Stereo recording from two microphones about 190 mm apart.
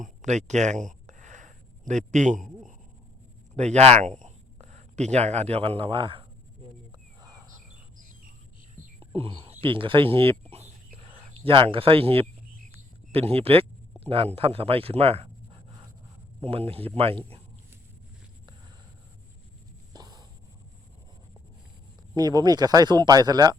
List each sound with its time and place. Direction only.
0.0 s a sound: 40° right (ahead or behind)
3.5 s a man's voice: 35° right (ahead or behind)
9.0 s speech: 30° right (ahead or behind)
10.5 s whispering: 35° right (ahead or behind)
12.7 s a sound: 30° right (ahead or behind)
14.0 s a man's voice: 30° right (ahead or behind)
16.4 s a man's voice: 30° right (ahead or behind)
19.9 s a sound: 20° right (ahead or behind)
22.1 s speech: 20° right (ahead or behind)